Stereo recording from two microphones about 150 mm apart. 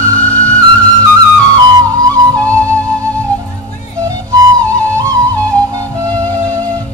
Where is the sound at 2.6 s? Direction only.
10° left (ahead or behind).